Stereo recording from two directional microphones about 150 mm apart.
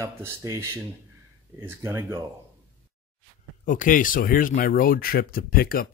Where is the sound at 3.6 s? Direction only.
60° left (ahead or behind).